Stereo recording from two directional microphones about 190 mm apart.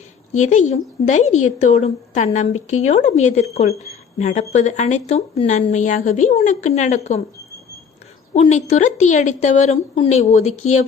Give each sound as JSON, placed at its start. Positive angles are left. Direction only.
{"t": 0.3, "sound": "a woman's voice", "side_deg": 40}
{"t": 8.3, "sound": "a woman's voice", "side_deg": 35}